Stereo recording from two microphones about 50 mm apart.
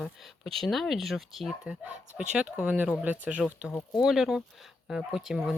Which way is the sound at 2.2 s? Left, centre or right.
Centre.